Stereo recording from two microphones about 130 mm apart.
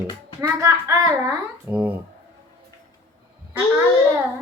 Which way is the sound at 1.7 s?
10° right (ahead or behind).